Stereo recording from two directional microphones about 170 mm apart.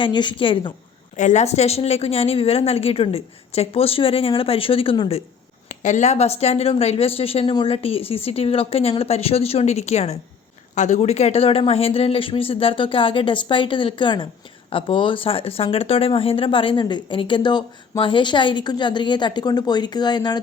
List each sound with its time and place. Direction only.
0.0 s speech: 25° left (ahead or behind)
1.1 s speech: 45° left (ahead or behind)
5.6 s speech: 45° left (ahead or behind); by 20.4 s 25° left (ahead or behind)